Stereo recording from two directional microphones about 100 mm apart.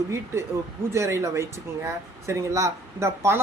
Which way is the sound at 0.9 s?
30° right (ahead or behind).